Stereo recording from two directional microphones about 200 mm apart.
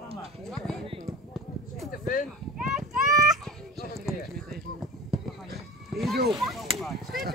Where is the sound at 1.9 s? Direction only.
40° left (ahead or behind).